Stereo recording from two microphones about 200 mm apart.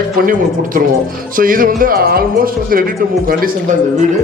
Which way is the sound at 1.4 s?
45° right (ahead or behind).